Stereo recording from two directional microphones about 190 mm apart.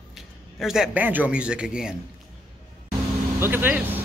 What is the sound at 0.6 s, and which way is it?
A man's voice, centre (ahead or behind).